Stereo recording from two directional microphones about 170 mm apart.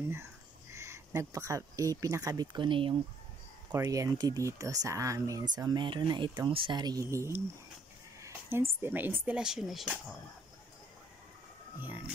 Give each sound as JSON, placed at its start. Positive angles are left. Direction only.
{"t": 0.1, "sound": "speech", "side_deg": -15}